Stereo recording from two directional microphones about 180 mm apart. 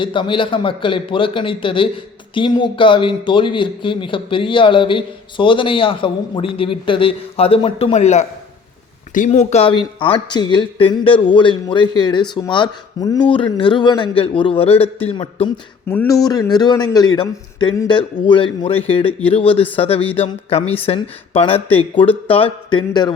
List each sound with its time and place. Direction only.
0.0 s a man's voice: 25° left (ahead or behind)
15.9 s speech: 10° left (ahead or behind)
16.2 s a man's voice: 20° left (ahead or behind)